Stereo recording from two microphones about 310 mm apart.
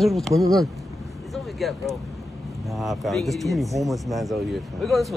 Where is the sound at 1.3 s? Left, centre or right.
Centre.